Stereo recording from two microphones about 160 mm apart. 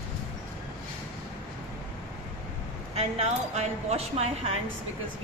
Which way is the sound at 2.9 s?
40° right (ahead or behind).